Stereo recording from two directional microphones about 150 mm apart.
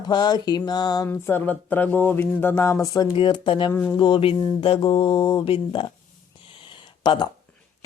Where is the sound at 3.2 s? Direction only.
35° left (ahead or behind).